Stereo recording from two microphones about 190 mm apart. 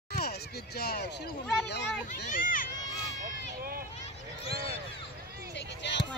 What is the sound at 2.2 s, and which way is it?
Speech, 45° left (ahead or behind).